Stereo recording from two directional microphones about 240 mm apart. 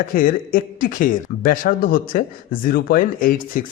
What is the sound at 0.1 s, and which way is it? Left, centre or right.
Speech, left.